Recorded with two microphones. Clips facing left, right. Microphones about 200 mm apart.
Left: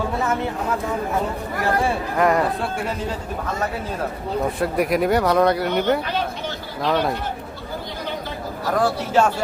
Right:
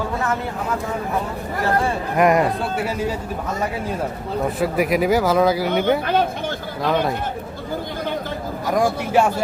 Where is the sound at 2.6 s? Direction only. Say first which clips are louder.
Right 3 dB; 5° right (ahead or behind).